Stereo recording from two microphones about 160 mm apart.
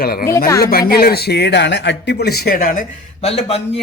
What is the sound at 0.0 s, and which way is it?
Speech, 70° left (ahead or behind).